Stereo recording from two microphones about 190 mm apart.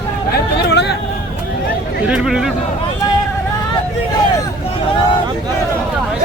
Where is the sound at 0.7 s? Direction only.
60° left (ahead or behind).